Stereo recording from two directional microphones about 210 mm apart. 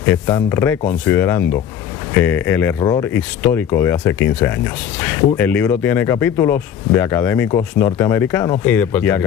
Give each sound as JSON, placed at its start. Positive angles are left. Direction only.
{"t": 0.3, "sound": "speech", "side_deg": 15}